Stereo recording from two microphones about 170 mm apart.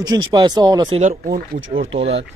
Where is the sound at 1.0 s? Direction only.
45° right (ahead or behind).